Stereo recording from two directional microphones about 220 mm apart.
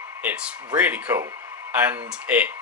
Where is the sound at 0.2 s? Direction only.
5° right (ahead or behind).